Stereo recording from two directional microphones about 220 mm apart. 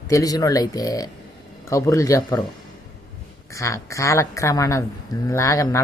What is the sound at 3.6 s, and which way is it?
Speech, 15° left (ahead or behind).